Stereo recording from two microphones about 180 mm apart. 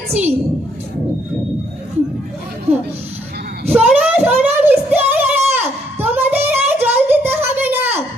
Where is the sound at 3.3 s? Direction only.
60° right (ahead or behind).